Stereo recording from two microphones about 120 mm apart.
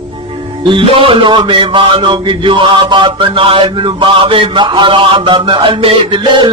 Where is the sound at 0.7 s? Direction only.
45° right (ahead or behind).